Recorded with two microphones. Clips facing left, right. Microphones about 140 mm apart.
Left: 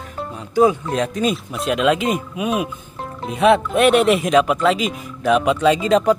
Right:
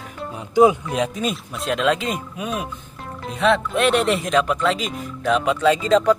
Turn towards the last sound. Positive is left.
turn(degrees=15)  # may be behind; listen again after turning